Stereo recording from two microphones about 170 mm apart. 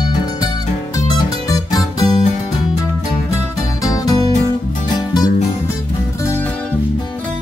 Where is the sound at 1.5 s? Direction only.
20° left (ahead or behind).